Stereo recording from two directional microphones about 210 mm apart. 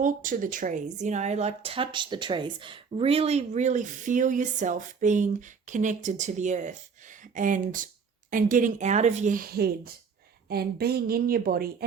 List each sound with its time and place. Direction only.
0.0 s a woman's voice: 40° right (ahead or behind)